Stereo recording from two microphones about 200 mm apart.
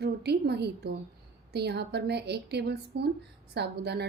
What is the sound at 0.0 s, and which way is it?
A woman's voice, 55° right (ahead or behind).